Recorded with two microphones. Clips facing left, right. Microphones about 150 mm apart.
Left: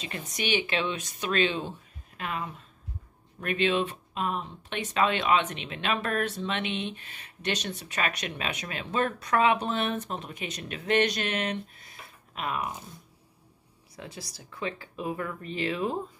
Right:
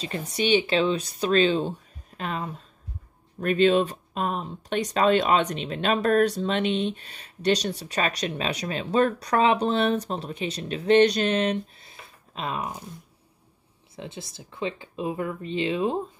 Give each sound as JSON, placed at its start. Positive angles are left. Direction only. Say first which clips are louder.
{"t": 0.0, "sound": "speech", "louder": "right 7 dB", "side_deg": -30}
{"t": 13.9, "sound": "speech", "louder": "right 4 dB", "side_deg": -25}